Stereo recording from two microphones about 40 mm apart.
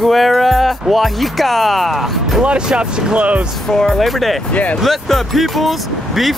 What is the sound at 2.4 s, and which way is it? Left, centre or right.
Speech, centre.